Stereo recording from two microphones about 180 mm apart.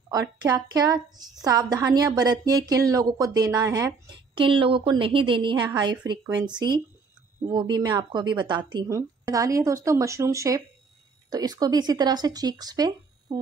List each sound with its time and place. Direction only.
0.1 s a woman's voice: 20° right (ahead or behind)